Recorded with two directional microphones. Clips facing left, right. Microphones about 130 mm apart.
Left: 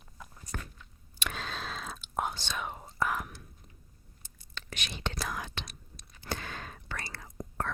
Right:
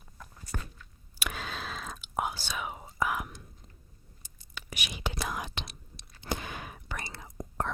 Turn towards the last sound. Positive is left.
turn(degrees=-20)  # may be behind; listen again after turning